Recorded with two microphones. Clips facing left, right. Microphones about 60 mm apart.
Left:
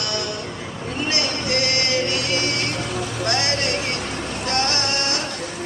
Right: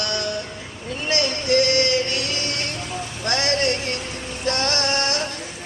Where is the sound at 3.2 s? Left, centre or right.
Right.